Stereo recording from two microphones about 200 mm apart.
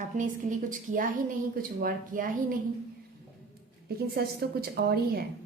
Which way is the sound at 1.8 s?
45° right (ahead or behind).